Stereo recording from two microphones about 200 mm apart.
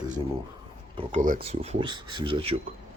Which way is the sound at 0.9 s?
40° right (ahead or behind).